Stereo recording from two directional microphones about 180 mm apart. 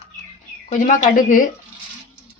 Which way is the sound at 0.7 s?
45° left (ahead or behind).